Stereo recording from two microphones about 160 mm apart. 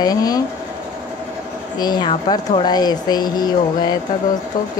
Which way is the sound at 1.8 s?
25° left (ahead or behind).